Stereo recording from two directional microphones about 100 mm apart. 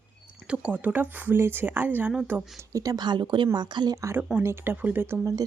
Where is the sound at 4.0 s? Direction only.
30° right (ahead or behind).